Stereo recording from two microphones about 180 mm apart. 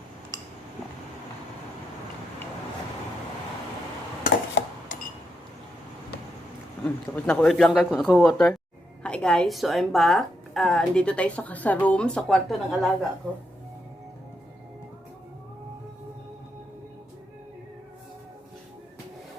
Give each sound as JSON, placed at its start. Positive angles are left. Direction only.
{"t": 4.2, "sound": "dishes", "side_deg": 65}
{"t": 6.8, "sound": "a woman's voice", "side_deg": 5}